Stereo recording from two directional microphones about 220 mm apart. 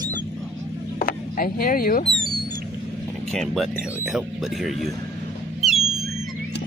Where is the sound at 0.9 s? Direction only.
40° left (ahead or behind).